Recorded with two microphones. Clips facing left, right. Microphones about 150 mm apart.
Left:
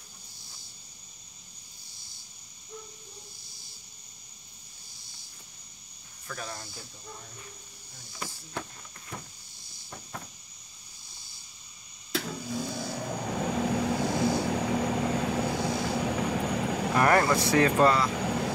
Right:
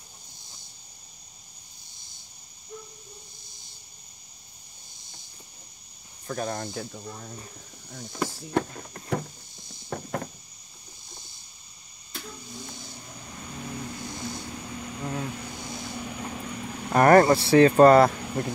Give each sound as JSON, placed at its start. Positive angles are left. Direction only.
{"t": 6.2, "sound": "speech", "side_deg": -45}
{"t": 8.1, "sound": "speech", "side_deg": -75}
{"t": 9.8, "sound": "a sound", "side_deg": -65}
{"t": 12.1, "sound": "vehicle", "side_deg": 90}
{"t": 16.9, "sound": "speech", "side_deg": -40}